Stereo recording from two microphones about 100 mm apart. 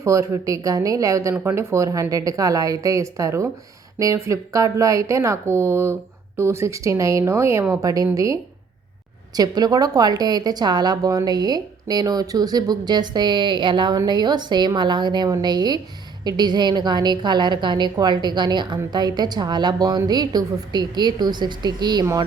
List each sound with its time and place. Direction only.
0.0 s a woman's voice: 30° right (ahead or behind)